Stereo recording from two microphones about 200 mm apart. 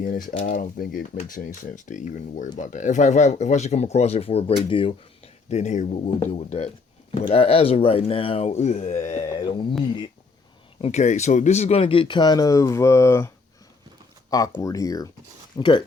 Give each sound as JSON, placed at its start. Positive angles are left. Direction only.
{"t": 0.0, "sound": "speech", "side_deg": 45}
{"t": 1.1, "sound": "speech", "side_deg": 30}
{"t": 10.8, "sound": "speech", "side_deg": 30}